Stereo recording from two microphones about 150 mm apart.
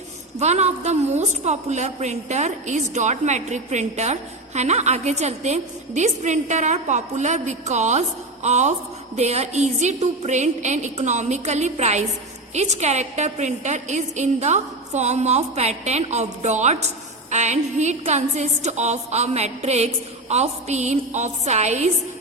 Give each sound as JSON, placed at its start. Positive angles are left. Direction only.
{"t": 0.3, "sound": "a woman's voice", "side_deg": -50}